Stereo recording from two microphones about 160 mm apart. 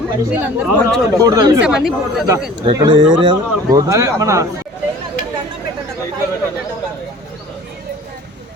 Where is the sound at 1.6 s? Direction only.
5° right (ahead or behind).